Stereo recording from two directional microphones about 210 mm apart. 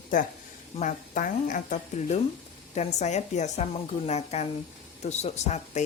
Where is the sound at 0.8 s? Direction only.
40° left (ahead or behind).